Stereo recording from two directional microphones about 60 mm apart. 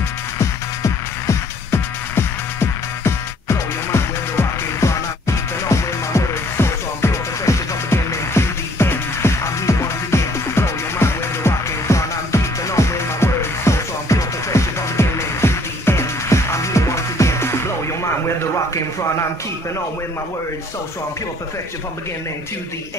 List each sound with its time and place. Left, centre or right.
1.7 s music: left